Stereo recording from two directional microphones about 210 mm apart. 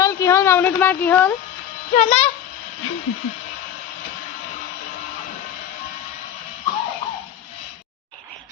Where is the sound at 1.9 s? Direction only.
30° left (ahead or behind).